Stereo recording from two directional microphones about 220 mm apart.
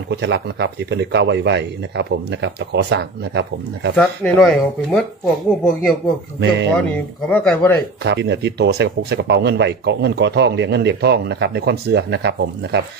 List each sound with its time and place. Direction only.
0.1 s speech: 50° right (ahead or behind)
3.9 s speech: centre (ahead or behind)
7.3 s speech: 5° left (ahead or behind)
8.0 s speech: 50° right (ahead or behind)